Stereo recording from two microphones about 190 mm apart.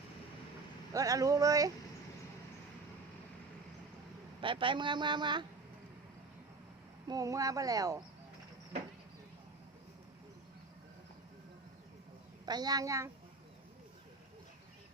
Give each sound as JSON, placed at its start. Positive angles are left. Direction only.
{"t": 0.9, "sound": "speech", "side_deg": -15}
{"t": 4.4, "sound": "a man's voice", "side_deg": -25}
{"t": 7.1, "sound": "speech", "side_deg": -20}
{"t": 12.5, "sound": "a man's voice", "side_deg": -20}